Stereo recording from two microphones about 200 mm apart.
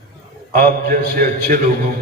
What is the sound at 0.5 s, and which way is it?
A man's voice, 45° right (ahead or behind).